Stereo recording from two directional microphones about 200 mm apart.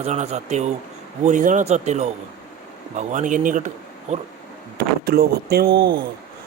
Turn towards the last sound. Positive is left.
turn(degrees=-55)  # may be behind; listen again after turning